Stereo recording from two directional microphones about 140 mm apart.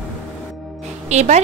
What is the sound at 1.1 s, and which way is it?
Speech, 55° right (ahead or behind).